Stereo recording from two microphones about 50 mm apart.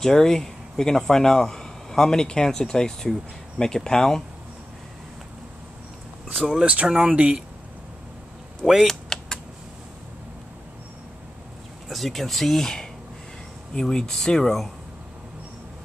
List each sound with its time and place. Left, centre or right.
0.0 s speech: centre
6.3 s speech: centre
6.6 s speech: right
8.8 s typing: centre
11.9 s speech: centre